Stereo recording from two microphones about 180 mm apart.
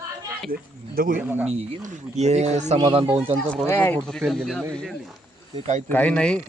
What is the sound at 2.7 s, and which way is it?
Speech, 25° right (ahead or behind).